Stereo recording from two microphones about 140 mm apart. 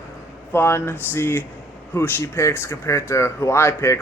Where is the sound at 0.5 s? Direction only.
15° left (ahead or behind).